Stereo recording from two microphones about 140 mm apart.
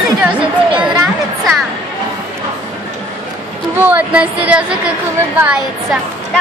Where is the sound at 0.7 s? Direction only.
Centre (ahead or behind).